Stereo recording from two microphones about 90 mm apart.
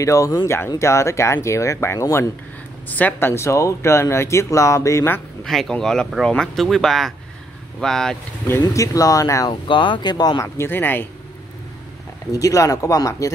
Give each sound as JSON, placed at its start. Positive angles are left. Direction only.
{"t": 0.0, "sound": "speech", "side_deg": 35}
{"t": 2.9, "sound": "speech", "side_deg": 20}
{"t": 5.4, "sound": "speech", "side_deg": 5}
{"t": 8.6, "sound": "speech", "side_deg": 40}
{"t": 9.5, "sound": "speech", "side_deg": 65}
{"t": 10.4, "sound": "speech", "side_deg": 25}
{"t": 12.3, "sound": "speech", "side_deg": 40}